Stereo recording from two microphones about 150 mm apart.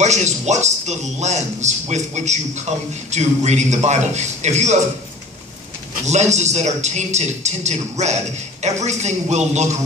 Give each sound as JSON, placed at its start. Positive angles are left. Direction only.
{"t": 0.0, "sound": "a man's voice", "side_deg": -50}
{"t": 6.0, "sound": "a man's voice", "side_deg": -50}